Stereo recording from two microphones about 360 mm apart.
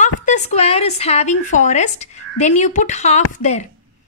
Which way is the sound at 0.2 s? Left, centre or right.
Centre.